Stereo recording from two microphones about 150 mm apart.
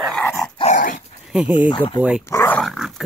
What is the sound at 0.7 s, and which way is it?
Dog, 60° left (ahead or behind).